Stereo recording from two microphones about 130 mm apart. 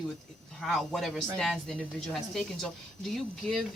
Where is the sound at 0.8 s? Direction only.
Centre (ahead or behind).